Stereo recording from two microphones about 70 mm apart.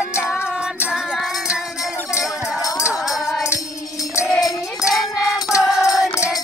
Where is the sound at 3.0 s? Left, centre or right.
Centre.